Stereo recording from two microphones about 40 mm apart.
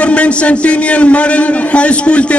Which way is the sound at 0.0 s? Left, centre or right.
Left.